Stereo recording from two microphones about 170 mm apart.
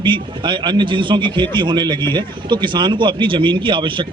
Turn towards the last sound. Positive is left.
turn(degrees=-30)  # may be behind; listen again after turning